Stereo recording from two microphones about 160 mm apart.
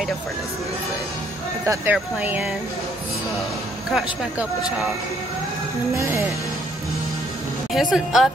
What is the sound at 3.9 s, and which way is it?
Speech, centre (ahead or behind).